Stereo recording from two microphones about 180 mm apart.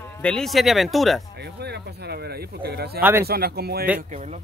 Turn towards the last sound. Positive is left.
turn(degrees=-60)  # may be behind; listen again after turning